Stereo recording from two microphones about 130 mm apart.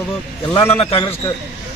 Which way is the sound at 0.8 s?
45° left (ahead or behind).